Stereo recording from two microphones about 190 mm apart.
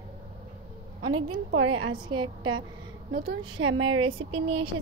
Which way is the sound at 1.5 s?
90° right.